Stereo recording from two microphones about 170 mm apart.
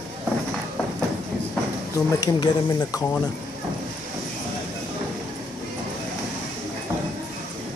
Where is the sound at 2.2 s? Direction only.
20° left (ahead or behind).